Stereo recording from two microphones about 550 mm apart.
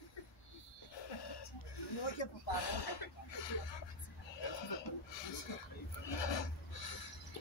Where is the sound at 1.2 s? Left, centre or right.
Left.